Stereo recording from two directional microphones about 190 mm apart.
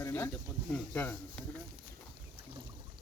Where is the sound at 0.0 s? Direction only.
10° left (ahead or behind).